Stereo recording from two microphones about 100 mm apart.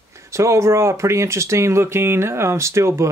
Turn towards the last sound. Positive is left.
turn(degrees=-30)  # may be behind; listen again after turning